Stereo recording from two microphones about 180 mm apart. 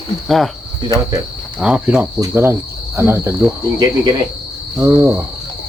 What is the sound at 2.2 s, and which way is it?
Cricket, 15° right (ahead or behind).